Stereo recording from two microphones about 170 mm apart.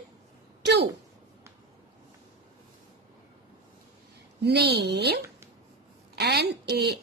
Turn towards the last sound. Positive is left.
turn(degrees=-75)  # may be behind; listen again after turning